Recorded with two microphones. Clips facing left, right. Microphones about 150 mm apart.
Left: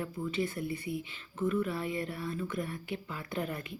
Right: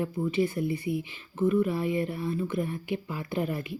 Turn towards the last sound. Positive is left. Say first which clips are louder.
# right 6 dB
turn(degrees=-20)  # may be behind; listen again after turning